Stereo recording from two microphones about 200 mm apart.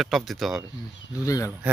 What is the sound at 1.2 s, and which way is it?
Speech, 15° left (ahead or behind).